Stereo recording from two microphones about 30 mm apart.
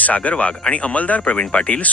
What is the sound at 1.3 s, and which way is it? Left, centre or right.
Speech, left.